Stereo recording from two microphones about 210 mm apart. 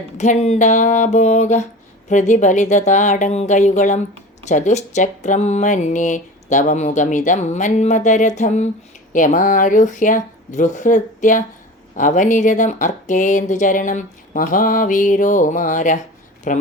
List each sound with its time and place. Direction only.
0.2 s speech: 30° left (ahead or behind)